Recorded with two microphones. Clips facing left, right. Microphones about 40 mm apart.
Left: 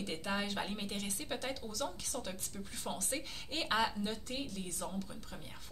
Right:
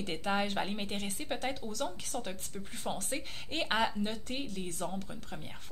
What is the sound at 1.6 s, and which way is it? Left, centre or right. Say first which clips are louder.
A woman's voice: right 3 dB; right.